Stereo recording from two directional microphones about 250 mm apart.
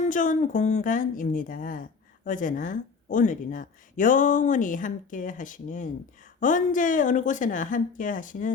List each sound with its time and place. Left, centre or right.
0.0 s a woman's voice: left